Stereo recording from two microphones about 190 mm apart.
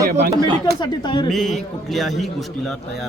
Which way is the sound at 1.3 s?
Centre (ahead or behind).